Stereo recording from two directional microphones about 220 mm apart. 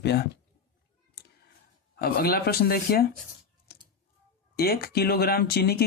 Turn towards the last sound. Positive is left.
turn(degrees=45)  # may be behind; listen again after turning